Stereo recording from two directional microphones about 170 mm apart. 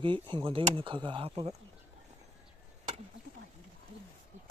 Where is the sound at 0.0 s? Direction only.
30° right (ahead or behind).